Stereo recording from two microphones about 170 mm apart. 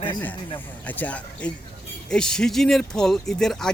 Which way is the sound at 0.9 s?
10° left (ahead or behind).